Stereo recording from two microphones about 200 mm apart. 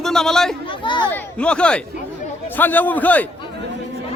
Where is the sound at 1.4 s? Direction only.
5° left (ahead or behind).